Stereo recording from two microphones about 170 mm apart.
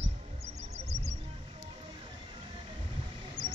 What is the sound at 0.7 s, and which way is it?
Music, 40° right (ahead or behind).